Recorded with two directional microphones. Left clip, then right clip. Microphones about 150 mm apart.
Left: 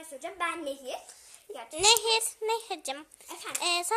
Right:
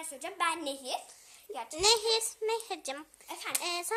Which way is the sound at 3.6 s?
15° left (ahead or behind).